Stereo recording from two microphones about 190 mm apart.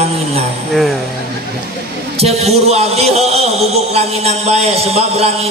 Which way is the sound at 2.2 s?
35° right (ahead or behind).